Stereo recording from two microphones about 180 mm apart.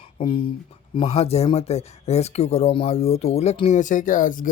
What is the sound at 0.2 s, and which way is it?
Speech, 30° left (ahead or behind).